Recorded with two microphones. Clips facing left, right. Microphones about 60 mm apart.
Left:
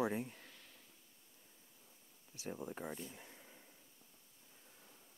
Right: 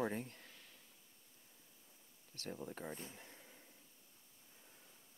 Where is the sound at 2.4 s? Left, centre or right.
Centre.